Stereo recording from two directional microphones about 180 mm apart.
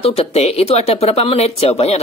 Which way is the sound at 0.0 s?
35° left (ahead or behind).